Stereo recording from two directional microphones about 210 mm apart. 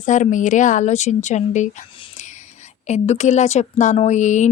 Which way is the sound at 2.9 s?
35° left (ahead or behind).